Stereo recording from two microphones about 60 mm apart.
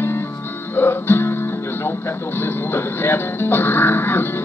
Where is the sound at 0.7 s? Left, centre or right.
Left.